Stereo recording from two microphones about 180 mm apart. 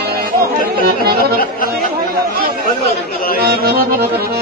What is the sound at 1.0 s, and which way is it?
Accordion, 60° right (ahead or behind).